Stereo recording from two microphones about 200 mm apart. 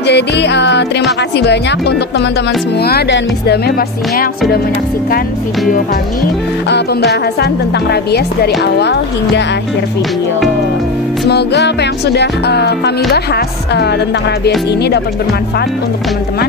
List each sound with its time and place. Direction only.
0.0 s music: 60° left (ahead or behind)
2.8 s speech: 55° left (ahead or behind)
6.7 s music: 55° left (ahead or behind)
7.9 s speech: 55° left (ahead or behind)
8.7 s music: 55° left (ahead or behind)
11.2 s music: 55° left (ahead or behind)